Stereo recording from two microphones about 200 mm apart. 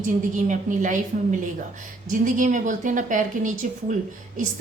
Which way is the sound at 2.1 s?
40° right (ahead or behind).